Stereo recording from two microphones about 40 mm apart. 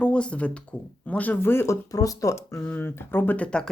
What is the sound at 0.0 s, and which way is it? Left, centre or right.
Speech, left.